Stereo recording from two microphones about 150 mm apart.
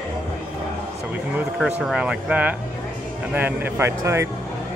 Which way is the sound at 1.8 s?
5° right (ahead or behind).